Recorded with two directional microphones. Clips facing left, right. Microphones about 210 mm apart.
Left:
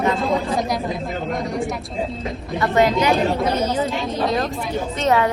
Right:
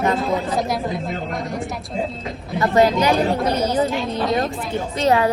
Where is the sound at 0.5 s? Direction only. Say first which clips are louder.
Even; centre (ahead or behind).